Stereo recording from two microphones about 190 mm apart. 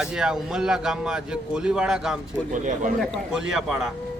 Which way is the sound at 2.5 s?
40° right (ahead or behind).